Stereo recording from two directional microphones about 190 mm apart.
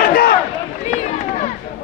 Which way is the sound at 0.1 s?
50° left (ahead or behind).